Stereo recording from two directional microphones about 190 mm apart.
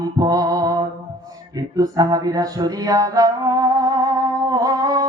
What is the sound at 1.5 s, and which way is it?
Music, 20° right (ahead or behind).